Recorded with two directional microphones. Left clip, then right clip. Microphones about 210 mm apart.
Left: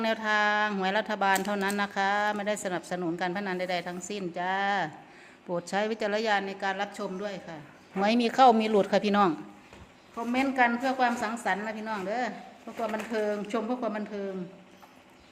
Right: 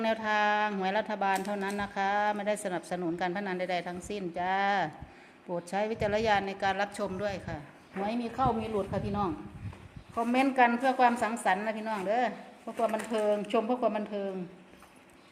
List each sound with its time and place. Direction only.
0.0 s speech: 5° right (ahead or behind)
5.5 s a woman's voice: 5° left (ahead or behind); by 7.6 s 25° right (ahead or behind)
8.0 s speech: 35° left (ahead or behind)
10.2 s a woman's voice: 20° right (ahead or behind)